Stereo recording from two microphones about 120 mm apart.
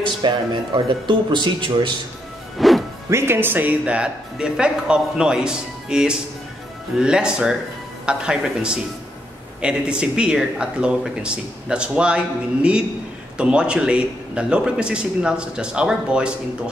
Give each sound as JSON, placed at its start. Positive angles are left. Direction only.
{"t": 0.0, "sound": "speech", "side_deg": -40}
{"t": 2.6, "sound": "music", "side_deg": 0}
{"t": 3.1, "sound": "speech", "side_deg": -20}
{"t": 13.4, "sound": "speech", "side_deg": -10}